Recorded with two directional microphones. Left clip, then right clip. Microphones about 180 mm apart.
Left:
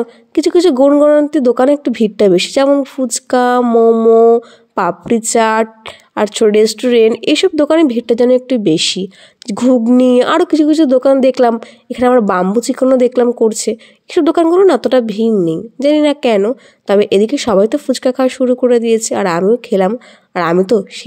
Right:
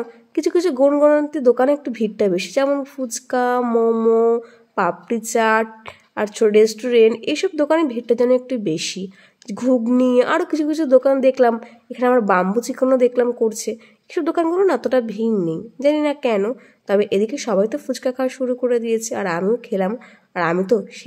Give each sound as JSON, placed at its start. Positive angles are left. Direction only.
{"t": 0.3, "sound": "a woman's voice", "side_deg": 35}
{"t": 3.6, "sound": "a sound", "side_deg": 20}
{"t": 4.4, "sound": "a woman's voice", "side_deg": 35}